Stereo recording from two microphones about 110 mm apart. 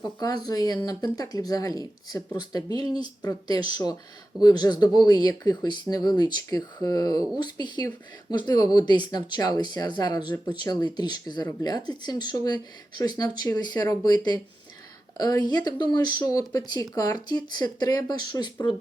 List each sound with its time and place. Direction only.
0.0 s speech: 35° left (ahead or behind)